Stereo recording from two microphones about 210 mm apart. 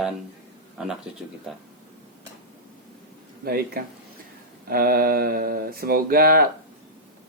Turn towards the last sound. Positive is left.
turn(degrees=-45)  # may be behind; listen again after turning